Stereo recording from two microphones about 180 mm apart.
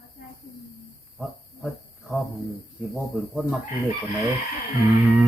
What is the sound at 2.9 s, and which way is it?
Speech, 5° right (ahead or behind).